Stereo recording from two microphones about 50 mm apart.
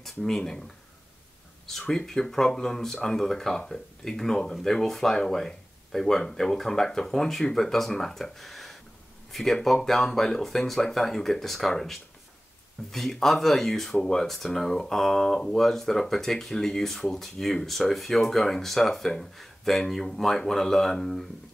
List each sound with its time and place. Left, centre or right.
0.0 s speech: centre
1.7 s speech: centre